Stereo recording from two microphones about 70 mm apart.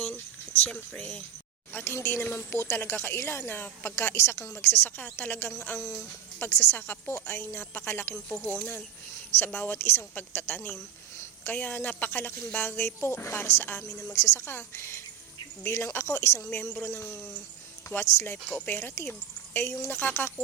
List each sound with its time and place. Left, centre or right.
0.0 s a sound: left
1.7 s speech: left
9.4 s speech: left
18.5 s speech: centre
19.5 s speech: left